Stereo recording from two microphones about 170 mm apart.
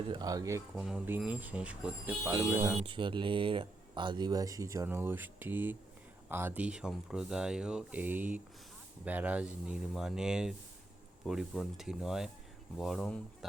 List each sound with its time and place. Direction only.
0.1 s speech: 20° right (ahead or behind)
0.8 s speech: 5° right (ahead or behind)
2.8 s speech: 30° right (ahead or behind); by 13.1 s centre (ahead or behind)